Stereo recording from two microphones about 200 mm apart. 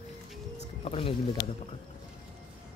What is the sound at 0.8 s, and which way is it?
Speech, 30° left (ahead or behind).